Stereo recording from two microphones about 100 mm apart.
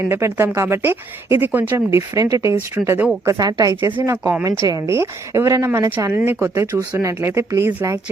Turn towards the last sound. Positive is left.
turn(degrees=-30)  # may be behind; listen again after turning